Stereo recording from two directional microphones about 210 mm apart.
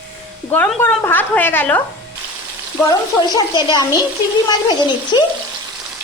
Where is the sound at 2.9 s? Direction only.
20° left (ahead or behind).